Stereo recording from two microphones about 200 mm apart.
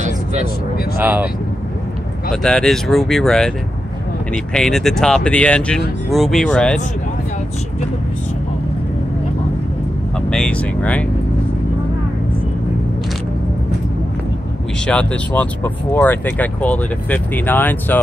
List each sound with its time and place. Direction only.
0.0 s a sound: 35° right (ahead or behind)
0.9 s speech: 10° right (ahead or behind)
2.4 s speech: centre (ahead or behind)
10.3 s speech: 5° left (ahead or behind)
14.9 s speech: 5° left (ahead or behind)